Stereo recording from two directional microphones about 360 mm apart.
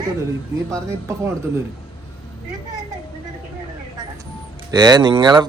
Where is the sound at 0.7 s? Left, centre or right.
Centre.